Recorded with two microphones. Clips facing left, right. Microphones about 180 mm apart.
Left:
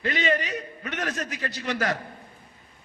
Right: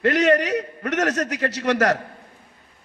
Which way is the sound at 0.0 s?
80° right.